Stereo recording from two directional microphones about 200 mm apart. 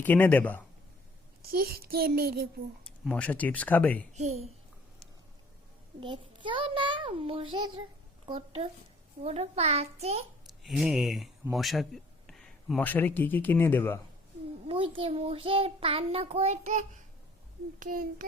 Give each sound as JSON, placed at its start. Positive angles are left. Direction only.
{"t": 0.0, "sound": "speech", "side_deg": 10}
{"t": 1.4, "sound": "a child's voice", "side_deg": -50}
{"t": 3.0, "sound": "speech", "side_deg": 5}
{"t": 4.1, "sound": "a child's voice", "side_deg": -35}
{"t": 6.0, "sound": "child singing", "side_deg": -25}
{"t": 9.2, "sound": "a child's voice", "side_deg": -30}
{"t": 10.6, "sound": "speech", "side_deg": 0}
{"t": 14.7, "sound": "child singing", "side_deg": -25}
{"t": 17.7, "sound": "a child's voice", "side_deg": -45}